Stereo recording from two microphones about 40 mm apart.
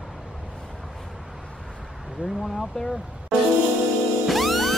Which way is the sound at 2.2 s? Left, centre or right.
Right.